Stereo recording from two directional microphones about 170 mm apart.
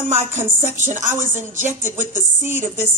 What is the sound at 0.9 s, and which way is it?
Speech, 50° right (ahead or behind).